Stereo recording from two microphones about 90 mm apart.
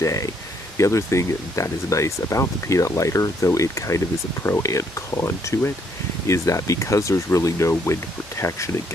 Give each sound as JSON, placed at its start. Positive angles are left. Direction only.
{"t": 0.0, "sound": "speech", "side_deg": 40}